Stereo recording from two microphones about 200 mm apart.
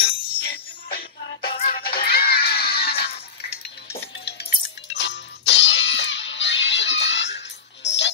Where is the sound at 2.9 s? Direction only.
50° left (ahead or behind).